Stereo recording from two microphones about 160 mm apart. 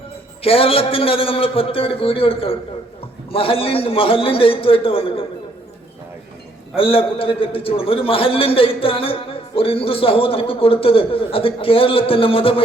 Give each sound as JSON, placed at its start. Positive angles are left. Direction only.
{"t": 0.4, "sound": "a man's voice", "side_deg": 35}
{"t": 6.7, "sound": "a man's voice", "side_deg": 35}